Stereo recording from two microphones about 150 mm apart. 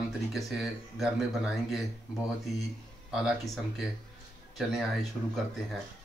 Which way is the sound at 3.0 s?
Centre (ahead or behind).